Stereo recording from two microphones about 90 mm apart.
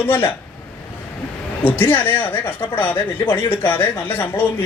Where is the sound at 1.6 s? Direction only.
20° left (ahead or behind).